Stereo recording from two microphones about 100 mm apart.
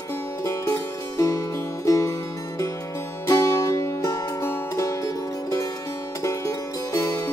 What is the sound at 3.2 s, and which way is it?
Music, 35° left (ahead or behind).